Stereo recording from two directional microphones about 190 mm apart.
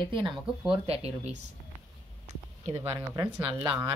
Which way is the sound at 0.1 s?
25° right (ahead or behind).